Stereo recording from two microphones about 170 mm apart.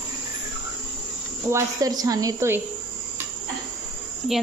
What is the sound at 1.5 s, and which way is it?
A woman's voice, 20° right (ahead or behind).